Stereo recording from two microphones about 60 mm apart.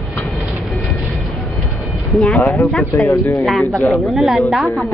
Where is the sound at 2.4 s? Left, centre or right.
Left.